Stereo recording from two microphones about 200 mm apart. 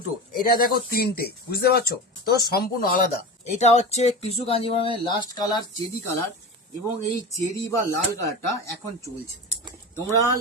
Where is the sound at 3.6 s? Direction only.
35° left (ahead or behind).